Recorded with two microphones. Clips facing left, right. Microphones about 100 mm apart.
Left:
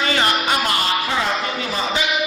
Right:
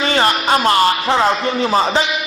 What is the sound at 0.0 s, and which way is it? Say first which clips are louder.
Music: right 4 dB; 35° right (ahead or behind).